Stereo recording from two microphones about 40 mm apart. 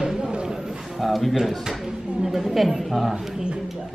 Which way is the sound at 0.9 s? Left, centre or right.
Centre.